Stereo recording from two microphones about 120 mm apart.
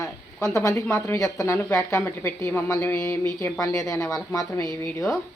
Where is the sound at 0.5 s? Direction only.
25° left (ahead or behind).